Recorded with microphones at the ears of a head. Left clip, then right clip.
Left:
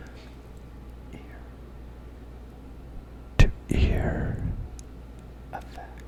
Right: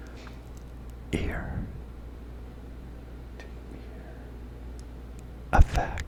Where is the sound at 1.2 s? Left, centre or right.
Right.